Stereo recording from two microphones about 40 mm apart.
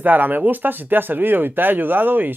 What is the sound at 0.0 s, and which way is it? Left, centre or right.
Speech, right.